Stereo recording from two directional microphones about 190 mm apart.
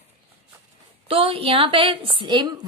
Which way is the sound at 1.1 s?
30° right (ahead or behind).